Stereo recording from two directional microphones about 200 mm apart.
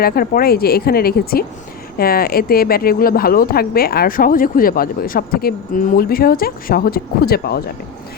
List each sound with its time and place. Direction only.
0.0 s speech: 50° left (ahead or behind)